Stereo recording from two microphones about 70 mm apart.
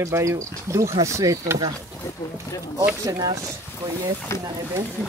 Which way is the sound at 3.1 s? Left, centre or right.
Right.